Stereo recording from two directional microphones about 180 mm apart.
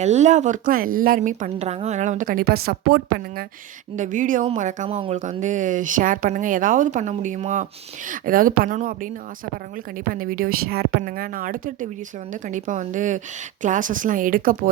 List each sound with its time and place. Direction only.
0.0 s a woman's voice: 40° right (ahead or behind); by 3.4 s 60° right (ahead or behind)
3.9 s a woman's voice: 45° right (ahead or behind)
10.1 s a woman's voice: 50° right (ahead or behind)